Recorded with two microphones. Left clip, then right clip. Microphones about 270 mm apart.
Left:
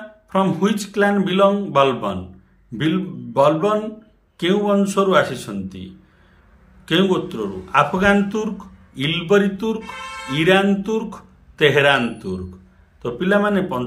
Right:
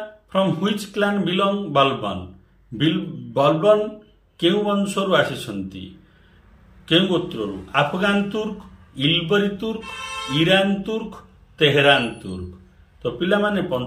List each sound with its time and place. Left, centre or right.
0.3 s a man's voice: centre
6.9 s a man's voice: centre